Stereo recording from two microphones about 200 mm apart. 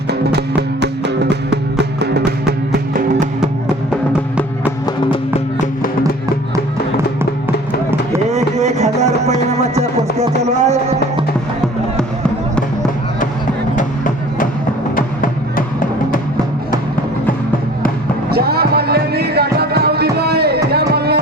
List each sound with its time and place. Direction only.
0.1 s music: 55° right (ahead or behind)
8.3 s a sound: 35° right (ahead or behind)
9.5 s music: 35° right (ahead or behind)
13.7 s a sound: 40° left (ahead or behind)
14.9 s music: 45° left (ahead or behind)
18.3 s music: 50° right (ahead or behind)